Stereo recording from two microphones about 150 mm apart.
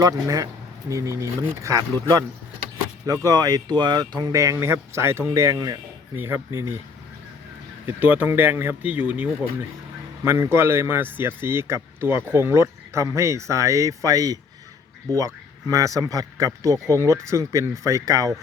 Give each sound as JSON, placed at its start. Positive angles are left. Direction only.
{"t": 0.0, "sound": "a man's voice", "side_deg": -25}
{"t": 3.2, "sound": "a man's voice", "side_deg": -25}
{"t": 7.9, "sound": "a man's voice", "side_deg": -10}